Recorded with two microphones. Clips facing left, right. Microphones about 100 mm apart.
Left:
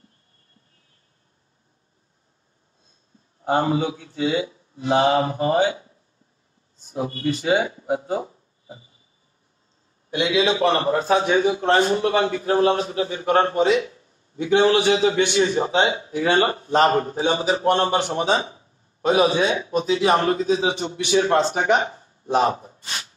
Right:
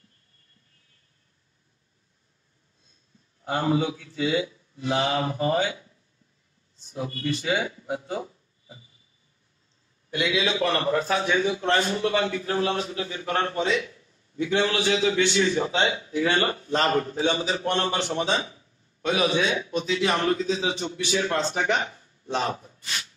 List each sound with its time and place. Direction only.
3.4 s a man's voice: 35° left (ahead or behind)
5.7 s a sound: 35° left (ahead or behind)
6.8 s speech: 40° left (ahead or behind)
10.1 s a man's voice: 30° left (ahead or behind)
20.5 s a man's voice: 50° left (ahead or behind)
21.2 s a man's voice: 30° left (ahead or behind)